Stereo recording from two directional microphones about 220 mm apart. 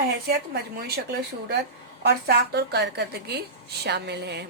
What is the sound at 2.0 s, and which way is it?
Speech, 45° right (ahead or behind).